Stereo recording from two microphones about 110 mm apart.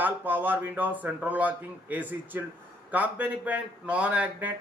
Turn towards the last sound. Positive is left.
turn(degrees=-15)  # may be behind; listen again after turning